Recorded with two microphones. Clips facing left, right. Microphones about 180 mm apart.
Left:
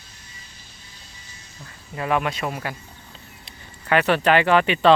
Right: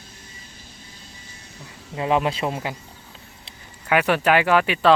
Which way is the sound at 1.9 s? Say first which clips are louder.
Right 2 dB; 25° right (ahead or behind).